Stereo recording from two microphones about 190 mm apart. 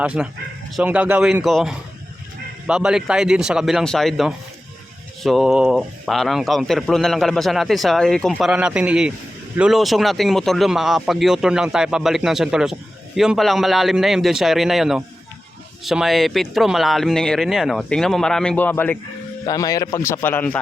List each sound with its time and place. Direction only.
0.0 s a man's voice: 5° right (ahead or behind); by 20.6 s 10° left (ahead or behind)